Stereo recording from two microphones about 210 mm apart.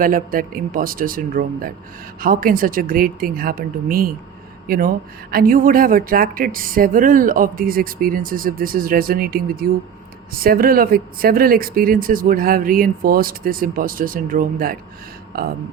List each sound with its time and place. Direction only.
0.0 s speech: 40° right (ahead or behind)